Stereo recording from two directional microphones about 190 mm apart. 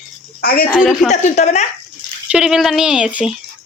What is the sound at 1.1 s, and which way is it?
Speech, 35° left (ahead or behind).